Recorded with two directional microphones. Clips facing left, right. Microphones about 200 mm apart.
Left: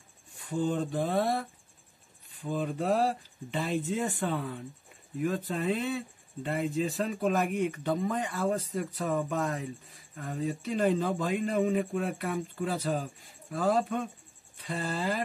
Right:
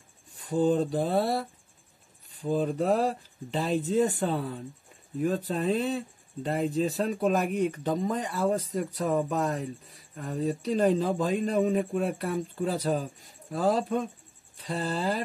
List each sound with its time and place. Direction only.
0.5 s speech: 35° right (ahead or behind)